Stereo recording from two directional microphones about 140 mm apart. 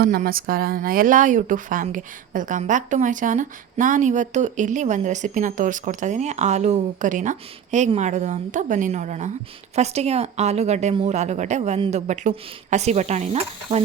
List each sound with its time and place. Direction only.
0.0 s speech: 90° right; by 13.8 s 45° right (ahead or behind)